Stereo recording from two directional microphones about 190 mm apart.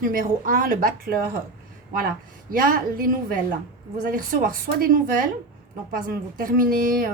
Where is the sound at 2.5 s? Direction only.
50° right (ahead or behind).